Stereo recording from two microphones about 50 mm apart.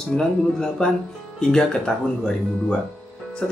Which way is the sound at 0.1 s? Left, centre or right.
Centre.